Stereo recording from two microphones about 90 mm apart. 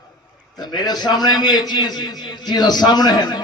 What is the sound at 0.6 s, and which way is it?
A man's voice, 50° left (ahead or behind).